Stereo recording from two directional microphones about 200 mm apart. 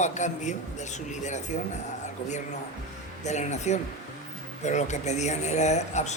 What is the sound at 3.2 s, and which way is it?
Speech, 35° left (ahead or behind).